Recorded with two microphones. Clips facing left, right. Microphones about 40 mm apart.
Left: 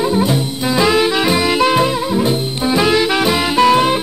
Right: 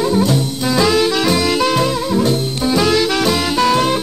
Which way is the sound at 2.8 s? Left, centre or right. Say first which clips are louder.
Left 1 dB; left.